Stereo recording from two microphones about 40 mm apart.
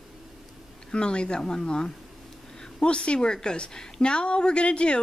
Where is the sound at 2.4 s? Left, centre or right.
Centre.